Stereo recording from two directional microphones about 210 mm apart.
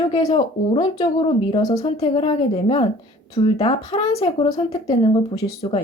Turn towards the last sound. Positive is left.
turn(degrees=25)  # may be behind; listen again after turning